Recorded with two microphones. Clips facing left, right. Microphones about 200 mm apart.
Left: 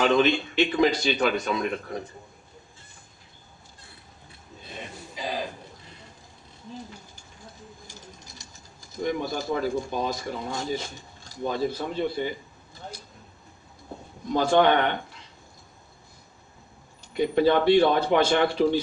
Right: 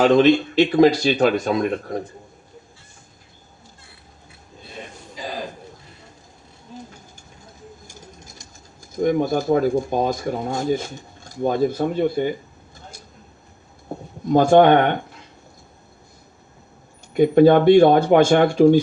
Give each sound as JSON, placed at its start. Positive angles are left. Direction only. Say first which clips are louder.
{"t": 0.0, "sound": "speech", "louder": "right 7 dB", "side_deg": -40}
{"t": 9.0, "sound": "speech", "louder": "right 9 dB", "side_deg": -50}
{"t": 14.3, "sound": "speech", "louder": "right 7 dB", "side_deg": -50}
{"t": 17.2, "sound": "speech", "louder": "right 8 dB", "side_deg": -50}